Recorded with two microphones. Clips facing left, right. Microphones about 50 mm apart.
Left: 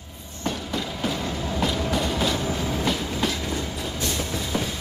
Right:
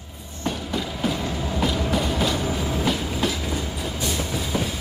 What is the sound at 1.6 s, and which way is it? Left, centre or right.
Train, centre.